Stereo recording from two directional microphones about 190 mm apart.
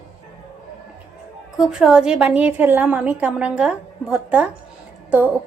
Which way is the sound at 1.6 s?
5° right (ahead or behind).